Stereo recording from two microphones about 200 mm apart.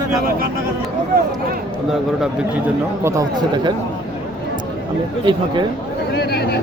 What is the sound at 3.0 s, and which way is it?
Speech, 15° right (ahead or behind).